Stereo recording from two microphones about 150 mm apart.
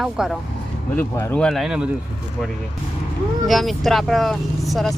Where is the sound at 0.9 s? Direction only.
15° left (ahead or behind).